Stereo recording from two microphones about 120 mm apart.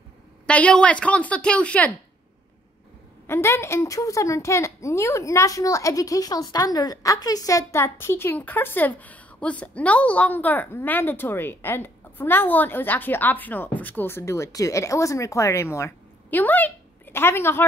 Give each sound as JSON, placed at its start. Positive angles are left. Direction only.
{"t": 0.5, "sound": "a woman's voice", "side_deg": 10}
{"t": 3.3, "sound": "a woman's voice", "side_deg": 20}